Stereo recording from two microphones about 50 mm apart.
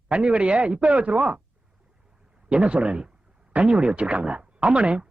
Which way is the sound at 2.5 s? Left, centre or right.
Right.